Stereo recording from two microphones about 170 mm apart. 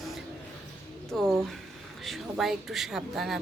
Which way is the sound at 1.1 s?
Centre (ahead or behind).